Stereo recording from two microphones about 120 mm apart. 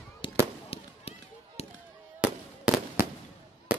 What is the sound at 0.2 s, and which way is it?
Fireworks, 45° left (ahead or behind).